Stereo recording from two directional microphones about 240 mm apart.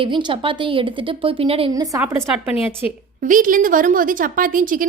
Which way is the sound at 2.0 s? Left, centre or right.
Centre.